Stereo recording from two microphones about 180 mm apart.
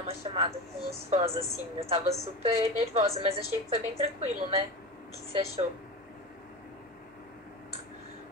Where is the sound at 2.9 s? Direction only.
35° right (ahead or behind).